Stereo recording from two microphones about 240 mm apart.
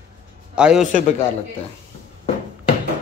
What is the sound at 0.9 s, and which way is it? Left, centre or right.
Speech, left.